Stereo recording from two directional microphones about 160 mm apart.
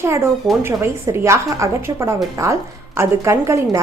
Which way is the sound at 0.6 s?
15° right (ahead or behind).